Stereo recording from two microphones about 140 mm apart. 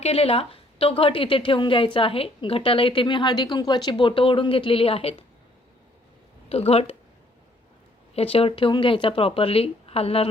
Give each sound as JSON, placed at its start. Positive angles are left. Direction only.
{"t": 0.0, "sound": "a woman's voice", "side_deg": 45}
{"t": 6.5, "sound": "speech", "side_deg": 45}
{"t": 8.1, "sound": "speech", "side_deg": 45}